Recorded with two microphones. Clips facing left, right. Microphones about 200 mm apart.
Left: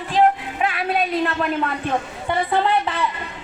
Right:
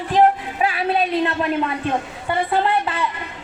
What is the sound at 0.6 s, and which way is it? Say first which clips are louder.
Speech: right 2 dB; 30° right (ahead or behind).